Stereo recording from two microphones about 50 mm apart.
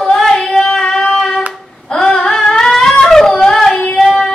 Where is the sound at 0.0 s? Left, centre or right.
Centre.